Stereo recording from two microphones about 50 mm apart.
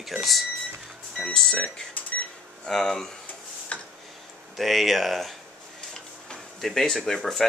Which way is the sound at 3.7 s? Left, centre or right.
Left.